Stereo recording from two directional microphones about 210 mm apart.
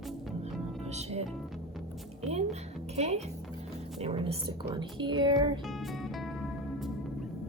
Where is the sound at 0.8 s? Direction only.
30° right (ahead or behind).